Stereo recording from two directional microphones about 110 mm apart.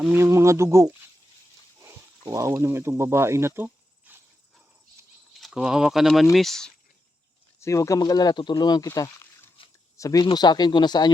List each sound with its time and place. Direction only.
0.1 s speech: 25° right (ahead or behind)
5.4 s speech: 5° right (ahead or behind)
7.6 s speech: 30° left (ahead or behind)
9.6 s a sound: 55° left (ahead or behind)
10.0 s speech: 35° left (ahead or behind)